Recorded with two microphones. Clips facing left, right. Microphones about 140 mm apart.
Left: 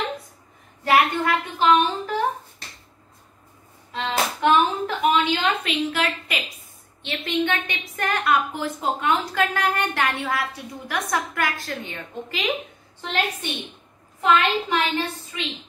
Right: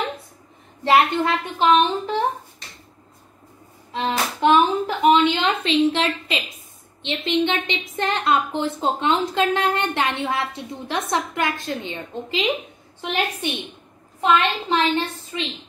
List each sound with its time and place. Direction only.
0.8 s a woman's voice: 25° right (ahead or behind)
3.9 s a sound: 20° right (ahead or behind)
7.0 s a woman's voice: 20° right (ahead or behind)
14.2 s a woman's voice: 25° right (ahead or behind)